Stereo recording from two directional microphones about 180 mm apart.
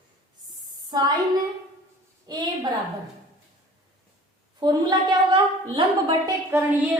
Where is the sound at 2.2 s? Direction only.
20° right (ahead or behind).